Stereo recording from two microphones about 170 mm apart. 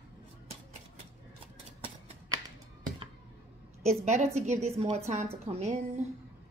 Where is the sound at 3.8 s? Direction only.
45° right (ahead or behind).